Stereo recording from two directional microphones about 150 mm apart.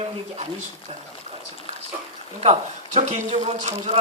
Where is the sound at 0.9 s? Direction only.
40° right (ahead or behind).